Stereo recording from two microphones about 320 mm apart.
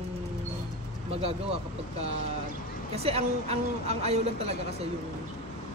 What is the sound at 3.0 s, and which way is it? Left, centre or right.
A woman's voice, centre.